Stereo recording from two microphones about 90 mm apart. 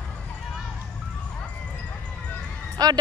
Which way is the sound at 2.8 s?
45° right (ahead or behind).